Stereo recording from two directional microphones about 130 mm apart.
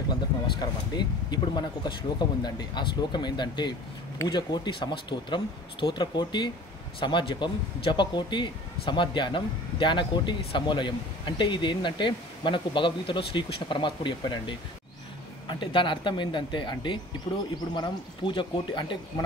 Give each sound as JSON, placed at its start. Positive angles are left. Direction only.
{"t": 0.1, "sound": "speech", "side_deg": 35}